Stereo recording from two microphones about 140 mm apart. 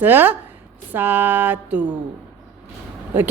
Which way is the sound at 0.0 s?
15° right (ahead or behind).